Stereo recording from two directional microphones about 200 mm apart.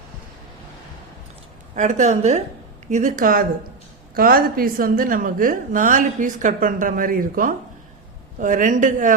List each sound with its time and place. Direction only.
1.7 s a woman's voice: 35° right (ahead or behind)